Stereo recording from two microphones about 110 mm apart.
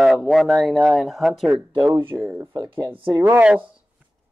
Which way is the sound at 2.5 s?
35° right (ahead or behind).